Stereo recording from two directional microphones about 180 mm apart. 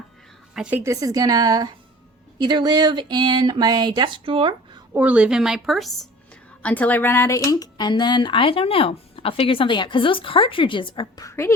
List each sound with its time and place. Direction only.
0.5 s a woman's voice: 5° right (ahead or behind)
0.9 s speech: 20° right (ahead or behind)
4.9 s a woman's voice: 5° right (ahead or behind); by 11.5 s 15° left (ahead or behind)